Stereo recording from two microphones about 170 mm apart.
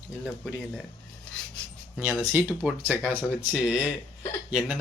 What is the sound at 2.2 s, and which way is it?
Speech, 10° right (ahead or behind).